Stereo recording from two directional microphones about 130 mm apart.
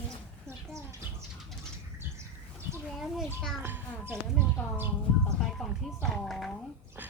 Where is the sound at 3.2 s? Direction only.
5° left (ahead or behind).